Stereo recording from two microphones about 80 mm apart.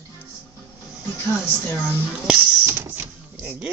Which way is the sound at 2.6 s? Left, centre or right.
Right.